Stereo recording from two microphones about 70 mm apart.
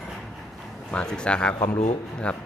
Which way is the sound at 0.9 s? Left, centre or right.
Centre.